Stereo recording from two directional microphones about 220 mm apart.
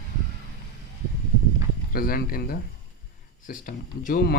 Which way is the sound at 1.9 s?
40° left (ahead or behind).